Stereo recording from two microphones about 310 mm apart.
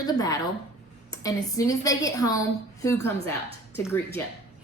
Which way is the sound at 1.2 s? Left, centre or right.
Centre.